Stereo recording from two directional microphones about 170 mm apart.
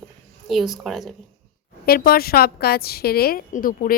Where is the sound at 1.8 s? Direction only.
60° left (ahead or behind).